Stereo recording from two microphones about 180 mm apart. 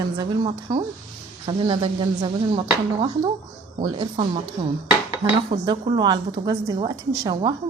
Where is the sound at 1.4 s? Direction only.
30° right (ahead or behind).